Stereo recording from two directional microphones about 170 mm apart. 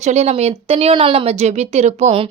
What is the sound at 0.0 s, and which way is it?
Speech, 40° right (ahead or behind).